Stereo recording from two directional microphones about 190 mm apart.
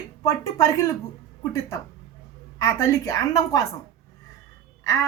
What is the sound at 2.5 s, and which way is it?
A child's voice, 15° left (ahead or behind).